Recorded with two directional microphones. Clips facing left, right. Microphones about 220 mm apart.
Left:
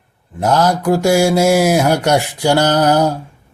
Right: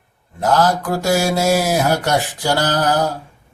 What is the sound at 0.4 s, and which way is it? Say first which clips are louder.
Speech: left 3 dB; 15° left (ahead or behind).